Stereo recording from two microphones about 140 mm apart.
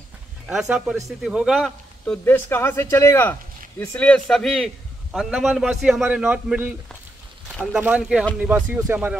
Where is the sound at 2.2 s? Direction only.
15° left (ahead or behind); by 6.7 s 10° right (ahead or behind).